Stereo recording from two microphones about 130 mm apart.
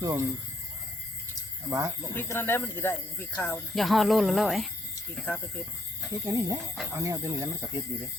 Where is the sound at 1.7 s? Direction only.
25° right (ahead or behind).